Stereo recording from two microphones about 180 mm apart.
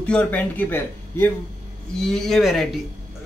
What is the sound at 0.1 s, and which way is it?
Speech, 10° left (ahead or behind).